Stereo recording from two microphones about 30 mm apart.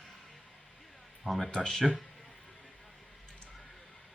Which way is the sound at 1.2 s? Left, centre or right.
Centre.